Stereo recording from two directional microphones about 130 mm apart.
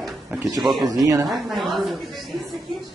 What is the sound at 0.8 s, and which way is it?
Speech, 30° right (ahead or behind).